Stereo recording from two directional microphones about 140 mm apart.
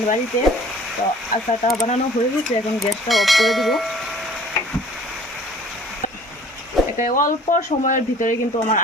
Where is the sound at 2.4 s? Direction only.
Centre (ahead or behind).